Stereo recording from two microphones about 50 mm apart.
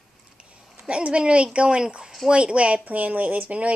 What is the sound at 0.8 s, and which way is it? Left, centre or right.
Speech, right.